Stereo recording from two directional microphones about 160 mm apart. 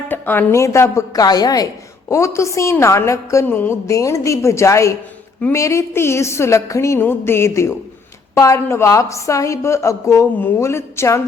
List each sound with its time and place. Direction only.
0.1 s a woman's voice: 15° left (ahead or behind)